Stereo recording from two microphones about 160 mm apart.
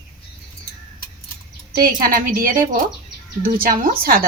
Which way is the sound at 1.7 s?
65° right (ahead or behind).